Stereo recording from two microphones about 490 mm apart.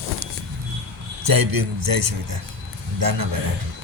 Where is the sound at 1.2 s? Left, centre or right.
Right.